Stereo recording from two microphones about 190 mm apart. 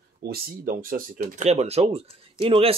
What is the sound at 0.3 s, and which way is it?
Speech, 45° right (ahead or behind).